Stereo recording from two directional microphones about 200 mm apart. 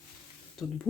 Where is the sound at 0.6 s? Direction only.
5° left (ahead or behind).